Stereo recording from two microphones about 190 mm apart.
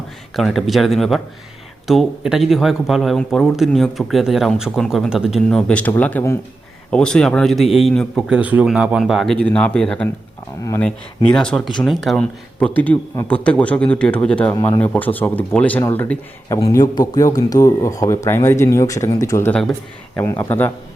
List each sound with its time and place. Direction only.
0.3 s speech: centre (ahead or behind)
10.6 s speech: 15° left (ahead or behind)
10.8 s speech: 5° left (ahead or behind)